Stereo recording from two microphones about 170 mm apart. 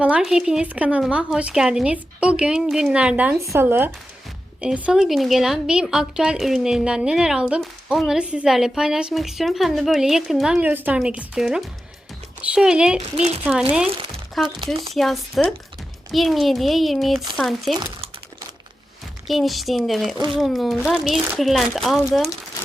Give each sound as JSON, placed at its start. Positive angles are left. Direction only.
{"t": 0.0, "sound": "a woman's voice", "side_deg": -5}
{"t": 13.0, "sound": "speech", "side_deg": -40}
{"t": 13.4, "sound": "a woman's voice", "side_deg": -5}
{"t": 14.4, "sound": "speech", "side_deg": -30}
{"t": 14.9, "sound": "a woman's voice", "side_deg": 0}
{"t": 19.3, "sound": "a woman's voice", "side_deg": 0}
{"t": 20.1, "sound": "speech", "side_deg": -30}
{"t": 20.4, "sound": "a woman's voice", "side_deg": 0}